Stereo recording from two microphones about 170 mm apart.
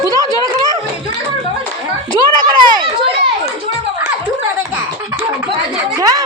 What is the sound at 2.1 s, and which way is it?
Children playing, 25° right (ahead or behind).